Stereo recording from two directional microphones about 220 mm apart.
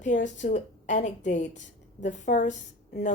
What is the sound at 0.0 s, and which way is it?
A woman's voice, 35° left (ahead or behind).